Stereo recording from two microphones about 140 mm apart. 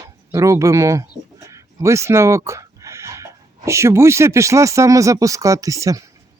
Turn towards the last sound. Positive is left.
turn(degrees=-25)  # may be behind; listen again after turning